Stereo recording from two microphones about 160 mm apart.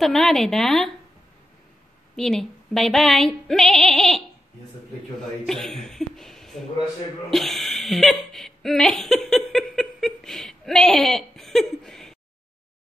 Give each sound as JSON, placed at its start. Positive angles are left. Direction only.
{"t": 0.0, "sound": "a woman's voice", "side_deg": 0}
{"t": 2.1, "sound": "female singing", "side_deg": 5}
{"t": 5.5, "sound": "speech", "side_deg": 5}